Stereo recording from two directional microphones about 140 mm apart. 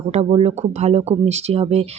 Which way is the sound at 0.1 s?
50° right (ahead or behind).